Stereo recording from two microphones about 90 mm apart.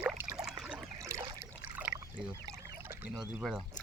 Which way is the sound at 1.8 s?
20° right (ahead or behind).